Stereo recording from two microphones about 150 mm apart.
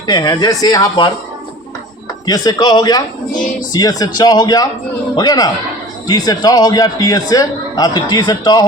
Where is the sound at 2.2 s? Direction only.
25° left (ahead or behind).